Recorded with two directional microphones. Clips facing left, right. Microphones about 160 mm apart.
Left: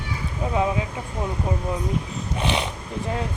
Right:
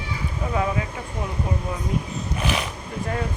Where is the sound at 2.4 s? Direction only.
25° left (ahead or behind).